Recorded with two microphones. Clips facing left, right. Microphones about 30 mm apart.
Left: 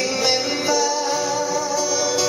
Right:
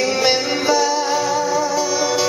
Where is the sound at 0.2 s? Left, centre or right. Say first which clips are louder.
Right 3 dB; centre.